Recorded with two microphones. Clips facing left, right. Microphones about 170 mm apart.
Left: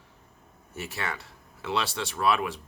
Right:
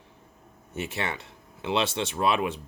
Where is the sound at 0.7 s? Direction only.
20° right (ahead or behind).